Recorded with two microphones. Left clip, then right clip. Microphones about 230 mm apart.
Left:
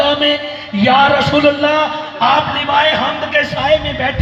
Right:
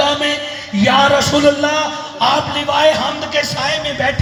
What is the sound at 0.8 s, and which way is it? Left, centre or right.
Speech, right.